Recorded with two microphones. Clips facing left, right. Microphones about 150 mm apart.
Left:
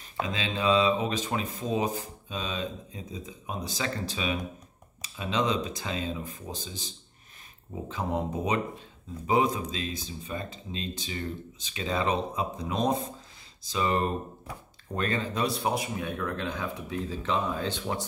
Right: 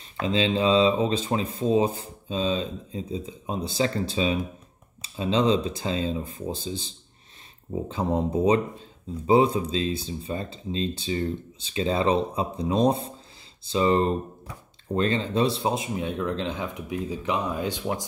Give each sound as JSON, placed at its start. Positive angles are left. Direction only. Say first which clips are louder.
{"t": 0.3, "sound": "speech", "louder": "right 5 dB", "side_deg": -30}
{"t": 7.9, "sound": "speech", "louder": "right 5 dB", "side_deg": -30}